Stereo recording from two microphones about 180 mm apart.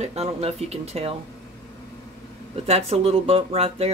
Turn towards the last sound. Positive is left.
turn(degrees=-35)  # may be behind; listen again after turning